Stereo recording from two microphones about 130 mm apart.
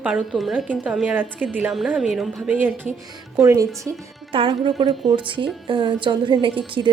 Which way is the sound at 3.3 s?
25° right (ahead or behind).